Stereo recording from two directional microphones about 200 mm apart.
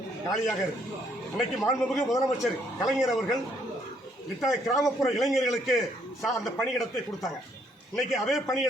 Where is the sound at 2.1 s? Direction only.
15° left (ahead or behind).